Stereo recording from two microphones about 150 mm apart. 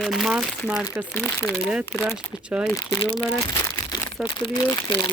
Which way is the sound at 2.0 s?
5° right (ahead or behind).